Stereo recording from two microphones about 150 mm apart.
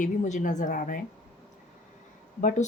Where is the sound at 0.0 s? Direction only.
55° left (ahead or behind).